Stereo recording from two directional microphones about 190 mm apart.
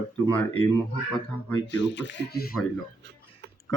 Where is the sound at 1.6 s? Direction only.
70° left (ahead or behind).